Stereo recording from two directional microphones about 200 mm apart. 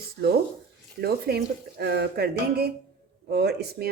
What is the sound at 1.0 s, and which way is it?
Speech, 50° right (ahead or behind).